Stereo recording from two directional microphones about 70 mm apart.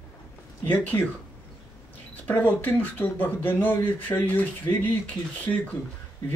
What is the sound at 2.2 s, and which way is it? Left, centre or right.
Speech, left.